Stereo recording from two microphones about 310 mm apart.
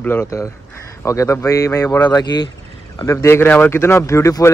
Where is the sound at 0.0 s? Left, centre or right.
Centre.